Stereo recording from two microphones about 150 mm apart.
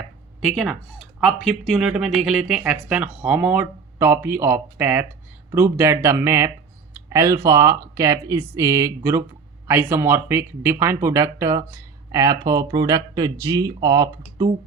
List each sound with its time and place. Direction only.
0.4 s speech: 5° right (ahead or behind); by 14.1 s 25° right (ahead or behind)